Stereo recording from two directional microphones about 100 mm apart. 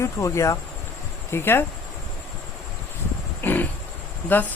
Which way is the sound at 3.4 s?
20° left (ahead or behind).